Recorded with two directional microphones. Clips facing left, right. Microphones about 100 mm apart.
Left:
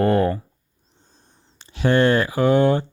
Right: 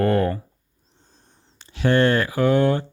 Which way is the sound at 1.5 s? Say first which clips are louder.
Left 1 dB; 20° left (ahead or behind).